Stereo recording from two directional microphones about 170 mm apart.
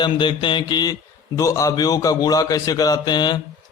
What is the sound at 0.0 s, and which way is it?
A man's voice, 30° left (ahead or behind).